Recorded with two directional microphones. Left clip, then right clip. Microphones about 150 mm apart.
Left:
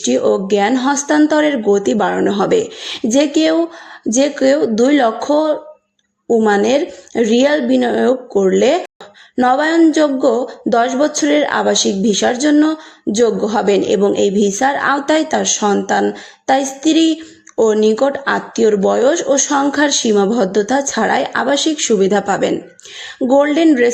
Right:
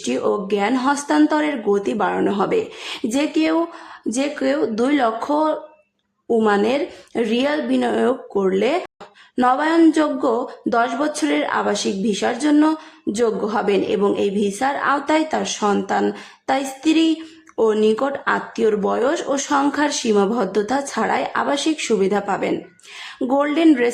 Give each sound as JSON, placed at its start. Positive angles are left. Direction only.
{"t": 0.0, "sound": "speech", "side_deg": 20}